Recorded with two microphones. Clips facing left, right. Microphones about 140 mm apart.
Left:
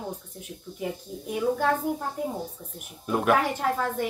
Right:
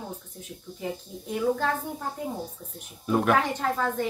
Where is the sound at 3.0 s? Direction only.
Centre (ahead or behind).